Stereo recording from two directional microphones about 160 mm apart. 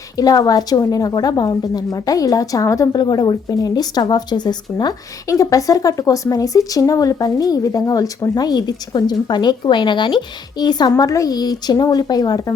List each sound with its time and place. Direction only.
0.2 s a woman's voice: 25° left (ahead or behind)